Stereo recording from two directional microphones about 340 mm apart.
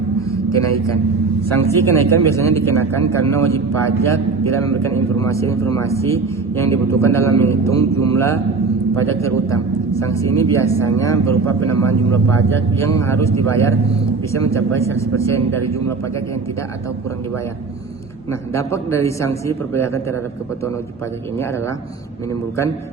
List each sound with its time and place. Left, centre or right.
0.5 s speech: right
1.7 s speech: centre
18.5 s speech: centre